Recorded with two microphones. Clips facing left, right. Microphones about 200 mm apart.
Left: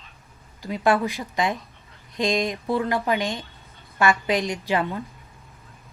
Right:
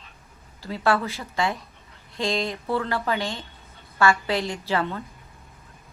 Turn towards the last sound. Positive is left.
turn(degrees=15)  # may be behind; listen again after turning